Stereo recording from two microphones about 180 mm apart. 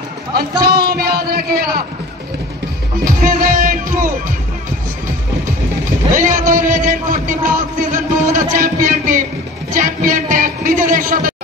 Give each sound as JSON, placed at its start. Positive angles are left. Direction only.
{"t": 0.3, "sound": "a man's voice", "side_deg": -60}
{"t": 3.1, "sound": "music", "side_deg": -50}
{"t": 6.1, "sound": "a man's voice", "side_deg": -50}
{"t": 7.9, "sound": "a sound", "side_deg": -50}
{"t": 8.5, "sound": "a man's voice", "side_deg": -50}
{"t": 9.8, "sound": "music", "side_deg": -50}